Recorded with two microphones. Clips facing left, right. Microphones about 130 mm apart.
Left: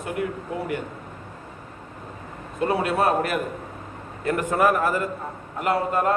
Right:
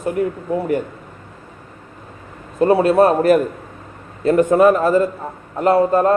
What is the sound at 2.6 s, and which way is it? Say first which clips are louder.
Speech: right 9 dB; 35° right (ahead or behind).